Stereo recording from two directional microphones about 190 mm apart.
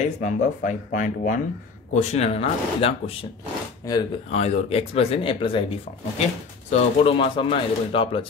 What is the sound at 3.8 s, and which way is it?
Speech, 20° left (ahead or behind).